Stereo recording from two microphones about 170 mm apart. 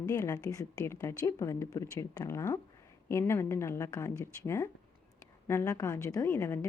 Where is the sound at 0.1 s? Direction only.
20° left (ahead or behind).